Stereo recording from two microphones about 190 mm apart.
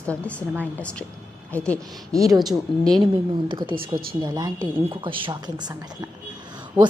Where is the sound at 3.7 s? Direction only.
50° right (ahead or behind).